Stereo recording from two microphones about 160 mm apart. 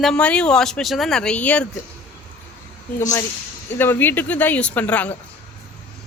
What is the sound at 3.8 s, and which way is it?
Speech, 10° left (ahead or behind).